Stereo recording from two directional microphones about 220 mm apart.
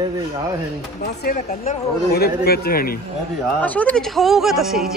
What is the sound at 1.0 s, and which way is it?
Speech, 45° left (ahead or behind).